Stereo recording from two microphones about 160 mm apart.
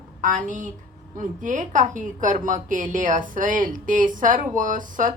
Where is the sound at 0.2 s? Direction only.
55° right (ahead or behind).